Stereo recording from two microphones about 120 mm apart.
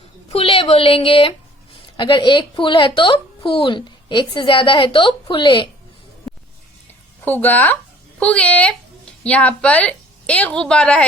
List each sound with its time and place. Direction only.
0.3 s speech: 55° left (ahead or behind)
7.3 s a woman's voice: 15° left (ahead or behind)